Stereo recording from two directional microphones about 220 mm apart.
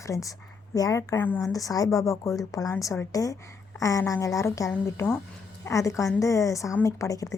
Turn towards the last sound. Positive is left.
turn(degrees=15)  # may be behind; listen again after turning